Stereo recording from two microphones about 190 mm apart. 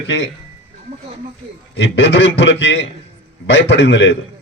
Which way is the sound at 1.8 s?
70° left (ahead or behind).